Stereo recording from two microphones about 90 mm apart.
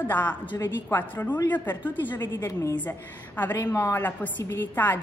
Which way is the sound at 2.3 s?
35° left (ahead or behind).